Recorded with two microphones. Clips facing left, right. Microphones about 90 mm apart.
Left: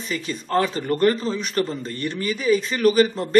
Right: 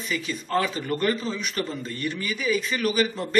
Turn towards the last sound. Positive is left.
turn(degrees=35)  # may be behind; listen again after turning